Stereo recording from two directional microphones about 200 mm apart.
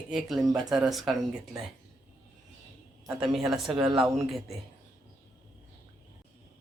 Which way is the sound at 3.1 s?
5° right (ahead or behind).